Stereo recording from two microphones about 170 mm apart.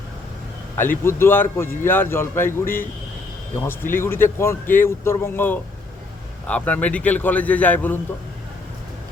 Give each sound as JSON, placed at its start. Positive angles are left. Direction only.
{"t": 0.8, "sound": "a man's voice", "side_deg": 15}